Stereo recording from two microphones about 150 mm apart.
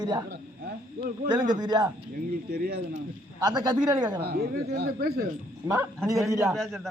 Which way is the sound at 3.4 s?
30° right (ahead or behind).